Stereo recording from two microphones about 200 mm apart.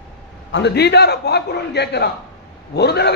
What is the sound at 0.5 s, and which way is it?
A man's voice, 55° left (ahead or behind).